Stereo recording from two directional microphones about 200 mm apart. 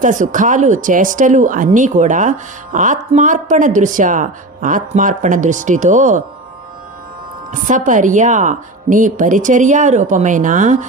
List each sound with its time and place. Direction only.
0.0 s speech: 40° right (ahead or behind)
7.5 s speech: 40° right (ahead or behind)